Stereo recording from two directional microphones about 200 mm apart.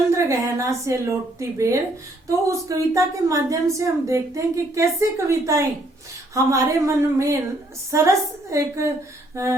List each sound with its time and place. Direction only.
0.1 s a woman's voice: 15° right (ahead or behind)
9.3 s mantra: 15° right (ahead or behind)